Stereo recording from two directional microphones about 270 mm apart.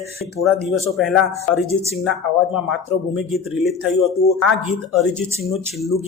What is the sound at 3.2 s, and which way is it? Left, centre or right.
Speech, centre.